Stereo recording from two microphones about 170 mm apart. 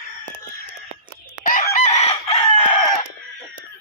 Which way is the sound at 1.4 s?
55° left (ahead or behind).